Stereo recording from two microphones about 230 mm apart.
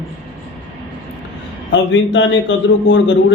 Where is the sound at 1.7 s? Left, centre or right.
Left.